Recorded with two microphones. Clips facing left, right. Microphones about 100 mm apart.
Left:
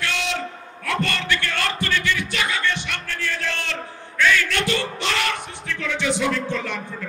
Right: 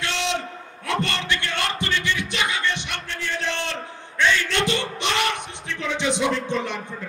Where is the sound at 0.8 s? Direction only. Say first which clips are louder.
Left 1 dB; 20° right (ahead or behind).